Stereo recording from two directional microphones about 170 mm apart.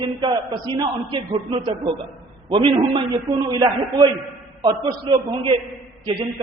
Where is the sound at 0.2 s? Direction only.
25° right (ahead or behind).